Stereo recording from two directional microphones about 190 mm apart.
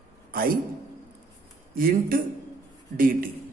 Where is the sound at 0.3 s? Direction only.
50° right (ahead or behind).